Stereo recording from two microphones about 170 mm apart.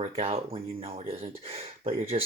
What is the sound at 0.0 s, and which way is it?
Speech, 35° right (ahead or behind).